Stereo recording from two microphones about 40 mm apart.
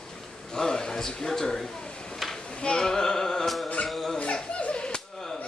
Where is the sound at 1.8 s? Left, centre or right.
Left.